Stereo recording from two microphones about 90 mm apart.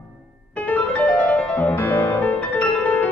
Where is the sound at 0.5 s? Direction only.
15° left (ahead or behind).